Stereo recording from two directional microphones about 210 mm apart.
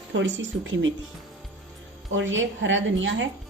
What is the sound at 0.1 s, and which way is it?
Speech, 65° right (ahead or behind).